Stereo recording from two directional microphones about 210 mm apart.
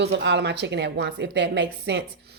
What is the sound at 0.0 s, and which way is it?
Speech, 55° right (ahead or behind).